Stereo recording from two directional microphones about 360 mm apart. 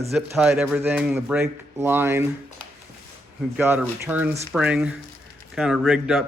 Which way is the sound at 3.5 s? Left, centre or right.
Centre.